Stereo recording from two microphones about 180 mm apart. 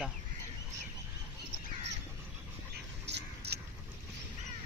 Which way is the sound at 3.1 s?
70° right (ahead or behind).